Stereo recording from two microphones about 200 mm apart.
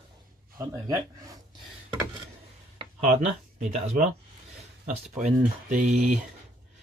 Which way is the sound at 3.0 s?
35° right (ahead or behind).